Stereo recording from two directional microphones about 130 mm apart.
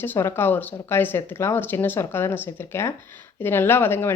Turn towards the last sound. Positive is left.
turn(degrees=15)  # may be behind; listen again after turning